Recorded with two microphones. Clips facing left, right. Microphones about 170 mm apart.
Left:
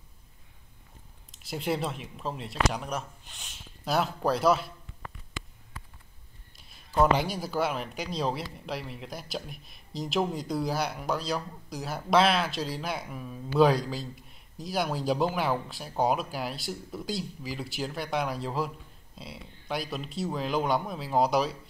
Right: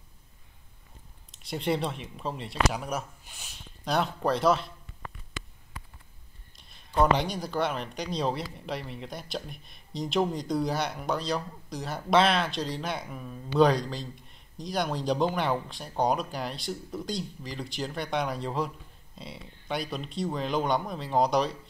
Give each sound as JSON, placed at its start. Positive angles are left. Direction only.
{"t": 1.3, "sound": "speech", "side_deg": 5}
{"t": 5.7, "sound": "a sound", "side_deg": -15}
{"t": 6.5, "sound": "speech", "side_deg": 5}